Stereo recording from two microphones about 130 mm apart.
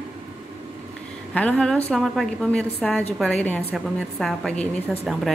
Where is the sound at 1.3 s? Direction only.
10° left (ahead or behind).